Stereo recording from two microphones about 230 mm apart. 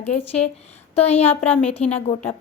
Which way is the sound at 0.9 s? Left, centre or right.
Left.